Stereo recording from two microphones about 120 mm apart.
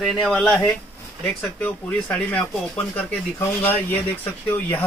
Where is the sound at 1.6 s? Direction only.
10° left (ahead or behind).